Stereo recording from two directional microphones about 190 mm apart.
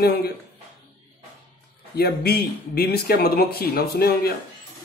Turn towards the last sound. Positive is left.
turn(degrees=55)  # may be behind; listen again after turning